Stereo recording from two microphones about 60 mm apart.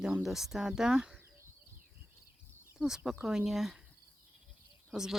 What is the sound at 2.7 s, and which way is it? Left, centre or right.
Speech, centre.